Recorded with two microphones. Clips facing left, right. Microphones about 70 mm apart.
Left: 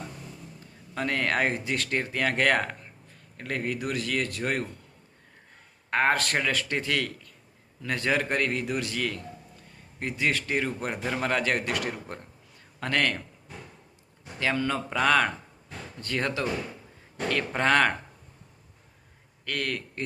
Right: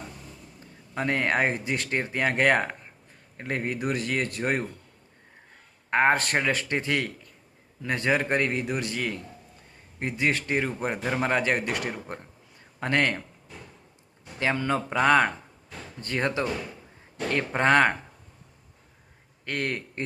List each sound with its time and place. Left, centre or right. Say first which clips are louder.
0.9 s speech: right 2 dB; right
5.9 s speech: right 2 dB; right
10.5 s a man's voice: right 2 dB; centre
14.3 s speech: right 1 dB; right
19.5 s speech: right 1 dB; right